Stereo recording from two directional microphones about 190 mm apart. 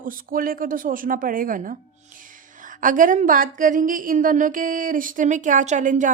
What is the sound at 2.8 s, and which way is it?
A woman's voice, 45° right (ahead or behind).